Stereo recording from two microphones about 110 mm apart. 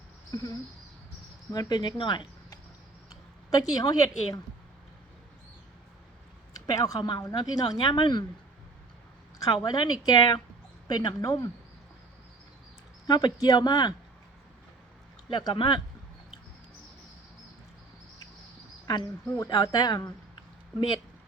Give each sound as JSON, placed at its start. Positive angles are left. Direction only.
{"t": 0.3, "sound": "speech", "side_deg": 35}
{"t": 1.5, "sound": "speech", "side_deg": 40}
{"t": 3.5, "sound": "speech", "side_deg": 35}
{"t": 6.5, "sound": "speech", "side_deg": 35}
{"t": 9.4, "sound": "speech", "side_deg": 35}
{"t": 13.1, "sound": "speech", "side_deg": 35}
{"t": 15.3, "sound": "speech", "side_deg": 40}
{"t": 18.9, "sound": "speech", "side_deg": 40}